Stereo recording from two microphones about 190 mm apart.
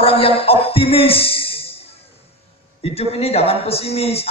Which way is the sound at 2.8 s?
30° left (ahead or behind).